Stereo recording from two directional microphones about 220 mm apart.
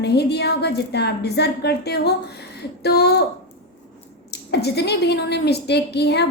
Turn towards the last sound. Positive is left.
turn(degrees=50)  # may be behind; listen again after turning